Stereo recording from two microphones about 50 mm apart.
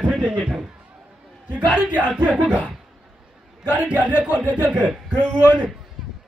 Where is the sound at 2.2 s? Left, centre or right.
Right.